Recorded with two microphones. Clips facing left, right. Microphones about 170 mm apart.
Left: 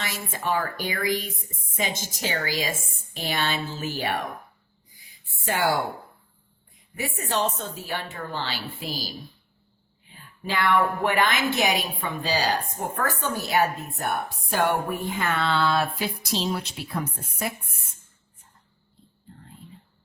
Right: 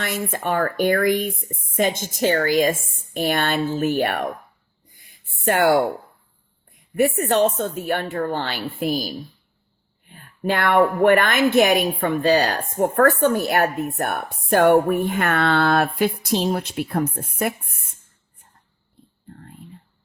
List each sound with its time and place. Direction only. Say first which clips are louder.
0.0 s a woman's voice: right 6 dB; 55° right (ahead or behind)
4.9 s a sound: right 2 dB; 55° right (ahead or behind)
6.9 s a woman's voice: right 10 dB; 55° right (ahead or behind)
19.4 s whispering: right 4 dB; 55° right (ahead or behind)